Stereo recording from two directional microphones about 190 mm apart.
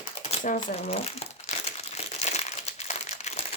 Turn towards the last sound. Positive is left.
turn(degrees=35)  # may be behind; listen again after turning